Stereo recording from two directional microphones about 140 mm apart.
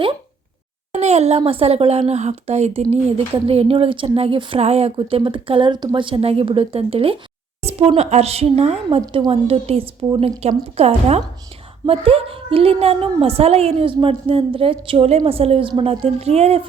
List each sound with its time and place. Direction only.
0.9 s a woman's voice: 50° right (ahead or behind)